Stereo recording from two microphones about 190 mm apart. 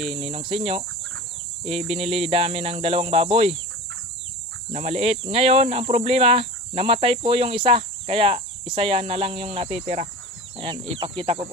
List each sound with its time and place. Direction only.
0.1 s speech: 30° right (ahead or behind)
1.9 s speech: 30° right (ahead or behind)
4.7 s speech: 35° right (ahead or behind)
11.0 s speech: 25° right (ahead or behind)